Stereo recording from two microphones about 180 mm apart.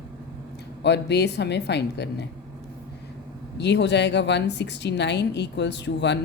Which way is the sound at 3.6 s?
75° left (ahead or behind).